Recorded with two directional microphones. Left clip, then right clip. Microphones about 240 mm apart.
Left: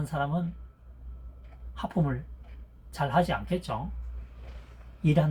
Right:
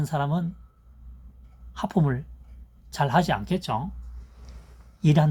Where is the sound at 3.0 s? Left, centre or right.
Right.